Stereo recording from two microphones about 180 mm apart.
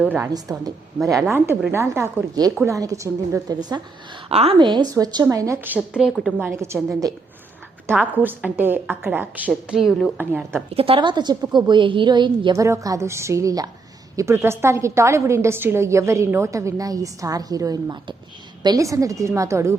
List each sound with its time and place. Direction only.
0.0 s a woman's voice: 10° right (ahead or behind)
4.3 s a woman's voice: 35° right (ahead or behind); by 6.5 s centre (ahead or behind)
6.5 s a woman's voice: 15° right (ahead or behind)
7.9 s a woman's voice: 10° right (ahead or behind)
10.8 s a woman's voice: 30° right (ahead or behind)